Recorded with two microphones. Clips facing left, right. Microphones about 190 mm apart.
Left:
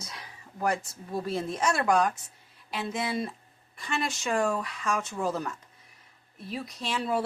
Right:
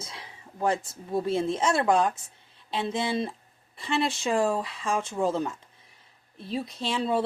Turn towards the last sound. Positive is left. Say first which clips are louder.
# right 3 dB
turn(degrees=-25)  # may be behind; listen again after turning